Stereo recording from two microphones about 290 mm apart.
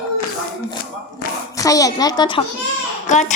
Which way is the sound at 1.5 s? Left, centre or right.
Centre.